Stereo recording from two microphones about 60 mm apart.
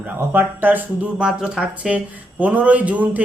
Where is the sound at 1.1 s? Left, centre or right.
Centre.